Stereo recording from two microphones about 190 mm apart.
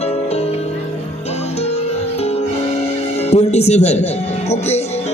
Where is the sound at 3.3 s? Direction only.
35° left (ahead or behind).